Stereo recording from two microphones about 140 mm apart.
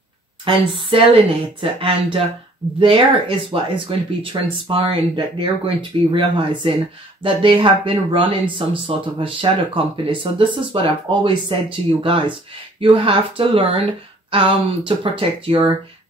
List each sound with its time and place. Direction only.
0.5 s speech: 40° right (ahead or behind)